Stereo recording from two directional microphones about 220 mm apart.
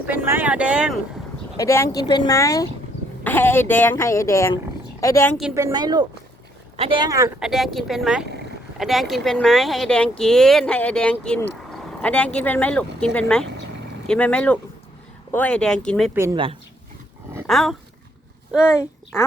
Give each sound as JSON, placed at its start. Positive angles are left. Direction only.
{"t": 0.0, "sound": "speech", "side_deg": -10}
{"t": 1.5, "sound": "speech", "side_deg": 10}
{"t": 5.5, "sound": "speech", "side_deg": -15}
{"t": 7.3, "sound": "speech", "side_deg": 0}
{"t": 16.1, "sound": "speech", "side_deg": -10}
{"t": 17.4, "sound": "dog", "side_deg": 0}